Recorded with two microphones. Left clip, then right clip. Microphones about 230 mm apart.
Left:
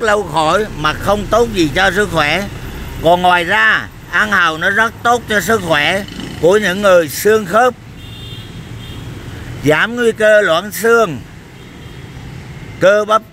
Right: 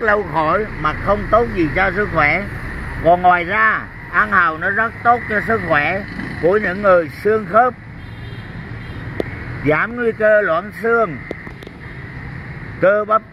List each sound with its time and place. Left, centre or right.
0.0 s speech: left
9.7 s speech: left
12.8 s speech: left